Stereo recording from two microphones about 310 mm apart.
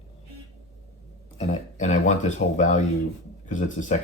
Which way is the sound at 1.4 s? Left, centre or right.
Left.